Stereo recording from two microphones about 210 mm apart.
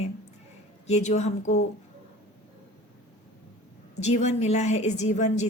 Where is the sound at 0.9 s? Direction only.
30° left (ahead or behind).